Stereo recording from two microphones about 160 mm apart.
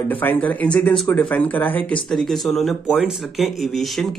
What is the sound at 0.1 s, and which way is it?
Speech, 10° left (ahead or behind).